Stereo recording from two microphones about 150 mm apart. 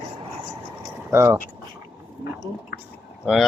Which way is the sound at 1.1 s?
15° right (ahead or behind).